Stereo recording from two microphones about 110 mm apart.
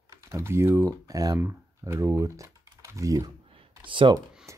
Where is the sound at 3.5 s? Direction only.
50° right (ahead or behind).